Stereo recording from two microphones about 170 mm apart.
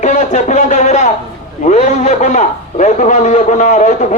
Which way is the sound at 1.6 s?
45° left (ahead or behind).